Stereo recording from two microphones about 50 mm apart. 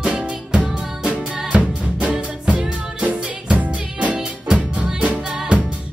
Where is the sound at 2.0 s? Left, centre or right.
Right.